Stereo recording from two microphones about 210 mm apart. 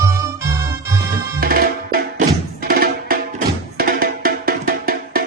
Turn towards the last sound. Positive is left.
turn(degrees=-45)  # may be behind; listen again after turning